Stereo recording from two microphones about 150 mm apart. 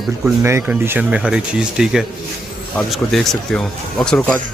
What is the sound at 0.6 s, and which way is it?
Speech, 10° right (ahead or behind).